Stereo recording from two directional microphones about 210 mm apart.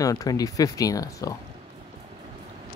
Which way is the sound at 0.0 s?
15° left (ahead or behind).